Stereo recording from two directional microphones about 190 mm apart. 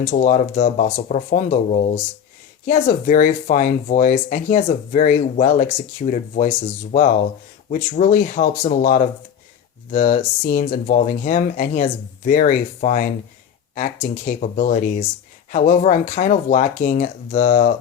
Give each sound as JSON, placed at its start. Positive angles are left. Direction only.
{"t": 0.0, "sound": "speech", "side_deg": 45}